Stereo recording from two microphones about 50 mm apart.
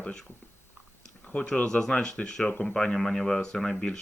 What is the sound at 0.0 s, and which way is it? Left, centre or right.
Speech, centre.